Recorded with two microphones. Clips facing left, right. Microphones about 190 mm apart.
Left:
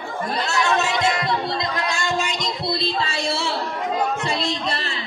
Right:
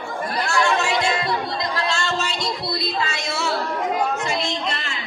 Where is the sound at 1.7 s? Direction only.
15° left (ahead or behind); by 3.5 s 30° left (ahead or behind).